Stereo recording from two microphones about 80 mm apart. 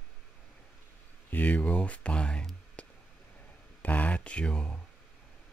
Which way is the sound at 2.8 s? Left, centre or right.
Centre.